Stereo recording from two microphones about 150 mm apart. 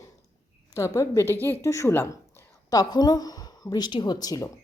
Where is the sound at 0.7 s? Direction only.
20° left (ahead or behind).